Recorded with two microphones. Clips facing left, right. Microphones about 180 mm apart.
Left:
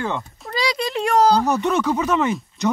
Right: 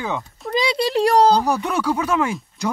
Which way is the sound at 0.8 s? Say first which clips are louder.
Right 3 dB; 35° right (ahead or behind).